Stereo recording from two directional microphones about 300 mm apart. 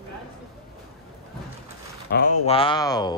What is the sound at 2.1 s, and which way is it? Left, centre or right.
Speech, left.